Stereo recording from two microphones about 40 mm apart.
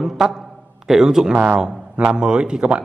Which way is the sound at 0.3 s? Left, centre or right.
Centre.